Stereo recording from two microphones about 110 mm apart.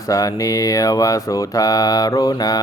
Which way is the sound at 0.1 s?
30° left (ahead or behind).